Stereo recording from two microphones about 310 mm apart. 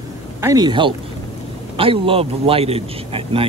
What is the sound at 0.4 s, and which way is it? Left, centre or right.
A man's voice, centre.